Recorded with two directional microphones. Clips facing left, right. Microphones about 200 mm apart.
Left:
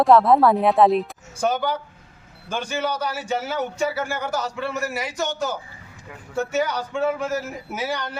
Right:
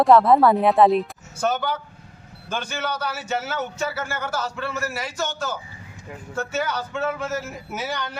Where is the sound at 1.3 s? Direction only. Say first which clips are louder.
Left 1 dB; 10° left (ahead or behind).